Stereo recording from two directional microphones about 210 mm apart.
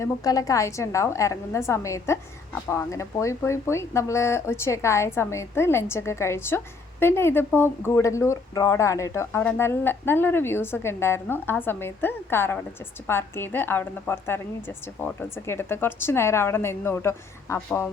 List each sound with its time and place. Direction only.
0.0 s speech: 15° left (ahead or behind)